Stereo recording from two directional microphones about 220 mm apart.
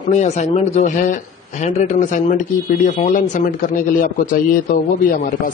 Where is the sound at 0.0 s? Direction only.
35° left (ahead or behind).